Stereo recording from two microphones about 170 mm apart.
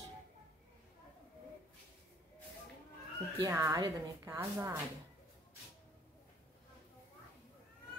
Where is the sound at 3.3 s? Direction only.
15° right (ahead or behind).